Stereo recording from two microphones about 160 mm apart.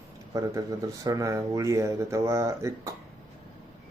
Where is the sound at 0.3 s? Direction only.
20° right (ahead or behind).